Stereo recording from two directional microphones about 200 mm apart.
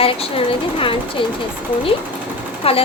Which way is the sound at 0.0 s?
30° left (ahead or behind).